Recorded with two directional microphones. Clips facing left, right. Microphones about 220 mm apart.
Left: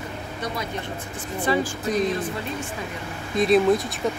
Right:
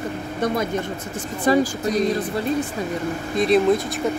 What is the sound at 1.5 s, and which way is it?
Speech, 40° right (ahead or behind).